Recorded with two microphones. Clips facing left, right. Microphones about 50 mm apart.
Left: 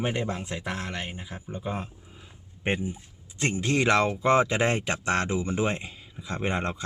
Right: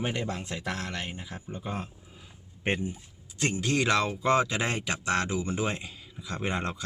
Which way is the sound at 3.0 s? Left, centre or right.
Left.